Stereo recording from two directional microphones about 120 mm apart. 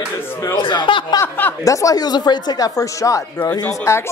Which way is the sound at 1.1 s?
25° left (ahead or behind).